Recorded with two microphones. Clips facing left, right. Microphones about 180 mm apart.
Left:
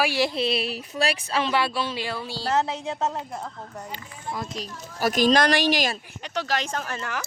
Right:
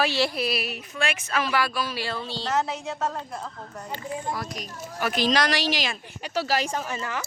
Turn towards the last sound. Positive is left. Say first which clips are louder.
# right 1 dB
turn(degrees=0)  # may be behind; listen again after turning